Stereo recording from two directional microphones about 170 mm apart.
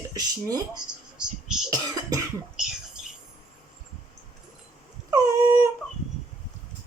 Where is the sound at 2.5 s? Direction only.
5° right (ahead or behind).